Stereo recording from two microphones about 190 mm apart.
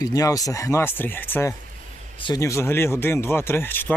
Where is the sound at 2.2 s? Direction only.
20° left (ahead or behind).